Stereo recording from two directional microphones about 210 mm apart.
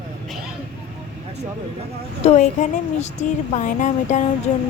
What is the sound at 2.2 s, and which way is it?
A woman's voice, 35° left (ahead or behind).